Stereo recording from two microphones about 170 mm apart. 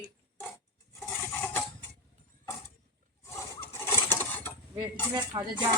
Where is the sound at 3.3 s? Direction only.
15° left (ahead or behind).